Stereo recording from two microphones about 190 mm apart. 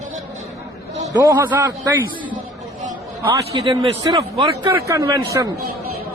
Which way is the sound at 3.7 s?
30° right (ahead or behind).